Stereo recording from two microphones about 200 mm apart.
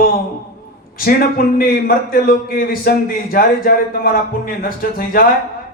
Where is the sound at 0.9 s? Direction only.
45° left (ahead or behind).